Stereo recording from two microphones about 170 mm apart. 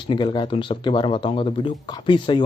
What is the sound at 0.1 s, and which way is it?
Speech, 25° left (ahead or behind).